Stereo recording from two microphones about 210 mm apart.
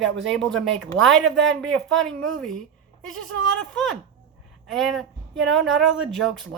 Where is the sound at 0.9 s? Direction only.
35° right (ahead or behind).